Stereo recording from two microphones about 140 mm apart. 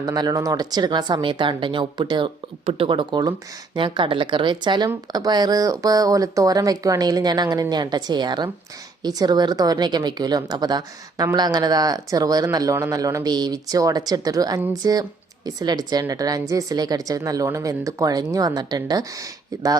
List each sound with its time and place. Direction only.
0.0 s a woman's voice: 30° right (ahead or behind)